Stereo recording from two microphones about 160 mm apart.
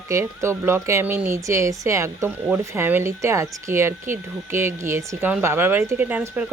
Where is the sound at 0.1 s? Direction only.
15° right (ahead or behind).